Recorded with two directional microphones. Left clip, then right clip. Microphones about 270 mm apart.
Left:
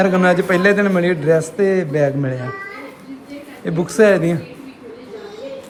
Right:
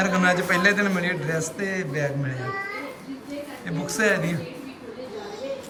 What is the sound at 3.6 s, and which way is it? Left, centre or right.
Speech, centre.